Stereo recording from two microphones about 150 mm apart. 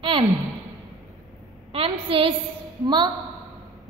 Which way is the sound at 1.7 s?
40° right (ahead or behind).